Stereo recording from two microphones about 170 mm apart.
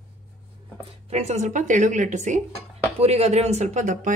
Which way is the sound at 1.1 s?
40° right (ahead or behind).